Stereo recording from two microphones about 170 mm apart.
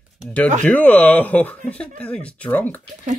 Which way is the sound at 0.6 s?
10° left (ahead or behind).